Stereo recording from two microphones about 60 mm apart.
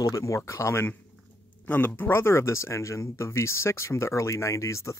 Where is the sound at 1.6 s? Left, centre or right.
Left.